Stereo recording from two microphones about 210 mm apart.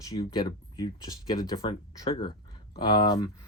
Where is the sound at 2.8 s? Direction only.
20° left (ahead or behind).